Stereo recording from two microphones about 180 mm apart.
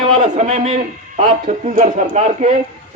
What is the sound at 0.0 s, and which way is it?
A man's voice, 35° right (ahead or behind).